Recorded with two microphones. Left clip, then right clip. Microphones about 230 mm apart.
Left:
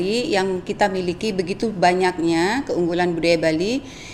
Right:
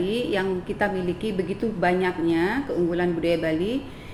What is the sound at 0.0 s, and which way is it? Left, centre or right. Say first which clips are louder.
A woman's voice: left 4 dB; left.